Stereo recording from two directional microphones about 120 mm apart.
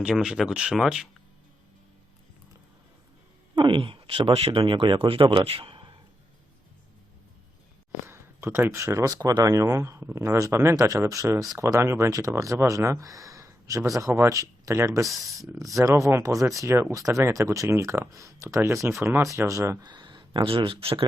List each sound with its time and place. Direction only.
0.0 s speech: 5° right (ahead or behind)
3.5 s a man's voice: 45° right (ahead or behind)
8.0 s speech: 20° right (ahead or behind)
15.0 s speech: centre (ahead or behind)
15.8 s speech: 25° right (ahead or behind)
19.8 s speech: 35° right (ahead or behind)